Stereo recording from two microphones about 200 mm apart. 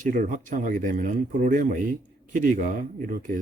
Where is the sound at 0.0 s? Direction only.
40° right (ahead or behind).